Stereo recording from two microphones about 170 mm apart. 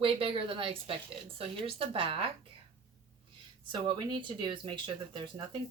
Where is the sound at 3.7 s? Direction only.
25° right (ahead or behind).